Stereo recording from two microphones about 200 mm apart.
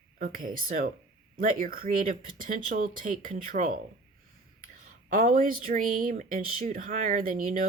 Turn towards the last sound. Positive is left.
turn(degrees=-45)  # may be behind; listen again after turning